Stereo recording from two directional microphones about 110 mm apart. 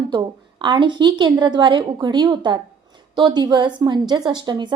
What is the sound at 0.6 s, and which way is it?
A woman's voice, 45° right (ahead or behind).